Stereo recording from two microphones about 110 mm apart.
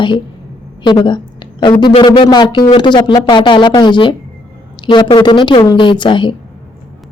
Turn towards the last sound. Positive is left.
turn(degrees=45)  # may be behind; listen again after turning